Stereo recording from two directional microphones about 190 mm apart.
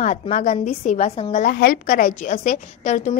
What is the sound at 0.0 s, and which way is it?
A woman's voice, 40° left (ahead or behind).